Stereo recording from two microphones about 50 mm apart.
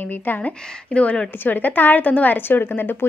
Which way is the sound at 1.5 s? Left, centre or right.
Left.